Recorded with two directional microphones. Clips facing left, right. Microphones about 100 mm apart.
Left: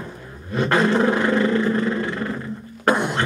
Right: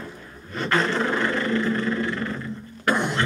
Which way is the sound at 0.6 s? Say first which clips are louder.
Left 5 dB; 15° left (ahead or behind).